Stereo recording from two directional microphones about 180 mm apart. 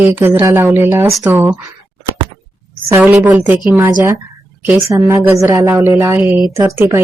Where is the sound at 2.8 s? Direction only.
15° right (ahead or behind).